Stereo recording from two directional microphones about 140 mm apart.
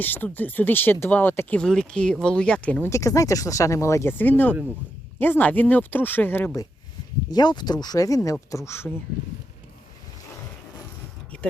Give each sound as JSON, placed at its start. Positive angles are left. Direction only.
{"t": 0.0, "sound": "speech", "side_deg": 15}
{"t": 2.9, "sound": "speech", "side_deg": 20}
{"t": 7.3, "sound": "speech", "side_deg": 30}